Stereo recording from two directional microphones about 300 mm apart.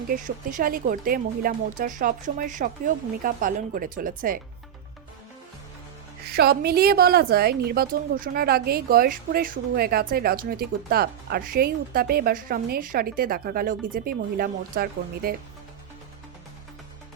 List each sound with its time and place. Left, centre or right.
0.1 s speech: right
6.2 s a woman's voice: right